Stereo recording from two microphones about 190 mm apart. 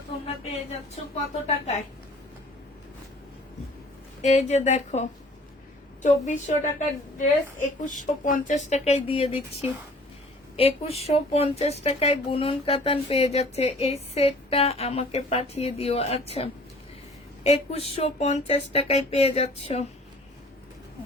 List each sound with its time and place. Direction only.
0.3 s a woman's voice: 35° left (ahead or behind)
4.2 s speech: 40° left (ahead or behind)